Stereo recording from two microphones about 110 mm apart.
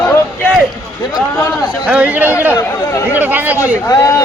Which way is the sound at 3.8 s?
30° left (ahead or behind).